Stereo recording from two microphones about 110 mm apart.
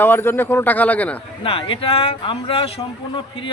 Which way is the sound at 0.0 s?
20° left (ahead or behind).